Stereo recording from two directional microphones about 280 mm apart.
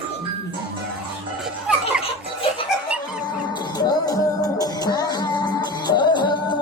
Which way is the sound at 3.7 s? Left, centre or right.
Centre.